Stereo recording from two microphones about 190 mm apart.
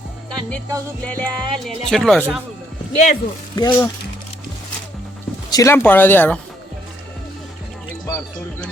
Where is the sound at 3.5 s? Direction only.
20° left (ahead or behind).